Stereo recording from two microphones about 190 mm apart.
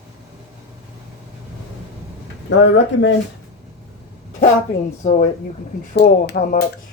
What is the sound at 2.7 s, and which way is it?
Speech, 75° left (ahead or behind).